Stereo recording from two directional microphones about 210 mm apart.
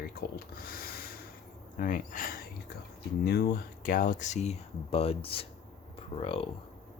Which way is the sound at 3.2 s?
50° left (ahead or behind).